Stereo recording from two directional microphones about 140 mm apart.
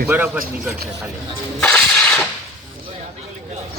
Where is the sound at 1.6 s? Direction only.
5° left (ahead or behind).